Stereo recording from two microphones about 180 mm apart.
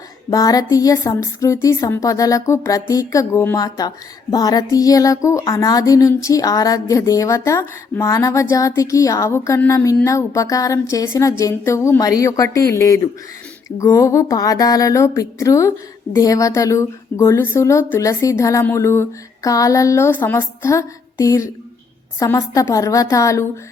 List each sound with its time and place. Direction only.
0.3 s a woman's voice: 20° left (ahead or behind)